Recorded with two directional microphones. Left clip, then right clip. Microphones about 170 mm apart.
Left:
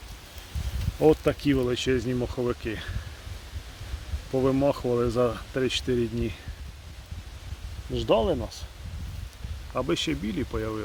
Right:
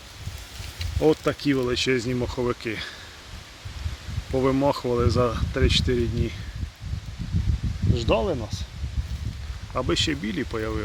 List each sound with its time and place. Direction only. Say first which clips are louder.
1.0 s speech: even; 15° left (ahead or behind); by 2.9 s 5° right (ahead or behind)
4.4 s speech: right 2 dB; 5° right (ahead or behind)
7.9 s speech: even; 20° left (ahead or behind)
9.7 s speech: right 3 dB; centre (ahead or behind)